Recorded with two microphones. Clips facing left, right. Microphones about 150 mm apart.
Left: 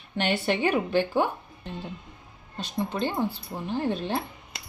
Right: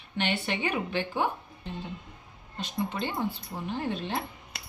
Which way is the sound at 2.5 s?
35° left (ahead or behind).